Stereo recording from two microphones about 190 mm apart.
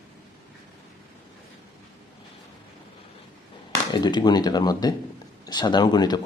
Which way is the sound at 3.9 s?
25° left (ahead or behind).